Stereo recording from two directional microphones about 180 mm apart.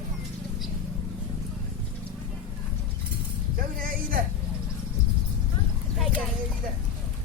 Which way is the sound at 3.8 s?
50° right (ahead or behind).